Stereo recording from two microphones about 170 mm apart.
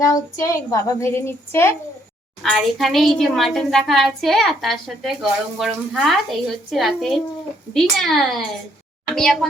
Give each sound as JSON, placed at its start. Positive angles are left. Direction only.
{"t": 0.0, "sound": "a woman's voice", "side_deg": 20}
{"t": 2.4, "sound": "a woman's voice", "side_deg": 0}